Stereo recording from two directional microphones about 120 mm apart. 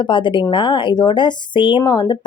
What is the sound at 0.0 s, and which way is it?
Speech, 40° left (ahead or behind).